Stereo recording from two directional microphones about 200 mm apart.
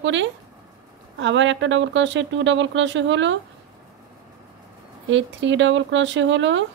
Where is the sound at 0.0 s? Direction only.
65° right (ahead or behind).